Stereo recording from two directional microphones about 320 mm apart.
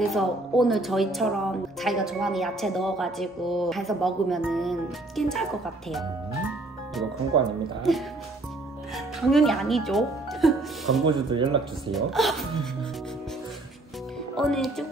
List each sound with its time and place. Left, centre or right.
0.1 s a woman's voice: centre
7.9 s a woman's voice: centre
11.1 s speech: centre
11.9 s a woman's voice: centre
14.3 s a woman's voice: centre